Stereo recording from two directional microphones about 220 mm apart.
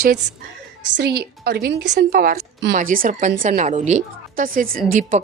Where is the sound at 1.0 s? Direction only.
45° right (ahead or behind).